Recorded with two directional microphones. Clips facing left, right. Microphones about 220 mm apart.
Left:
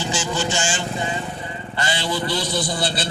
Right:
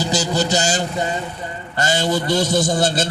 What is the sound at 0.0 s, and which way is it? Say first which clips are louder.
A man's voice: right 4 dB; 40° right (ahead or behind).